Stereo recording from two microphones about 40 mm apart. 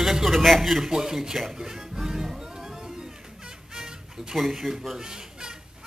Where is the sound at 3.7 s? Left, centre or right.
Centre.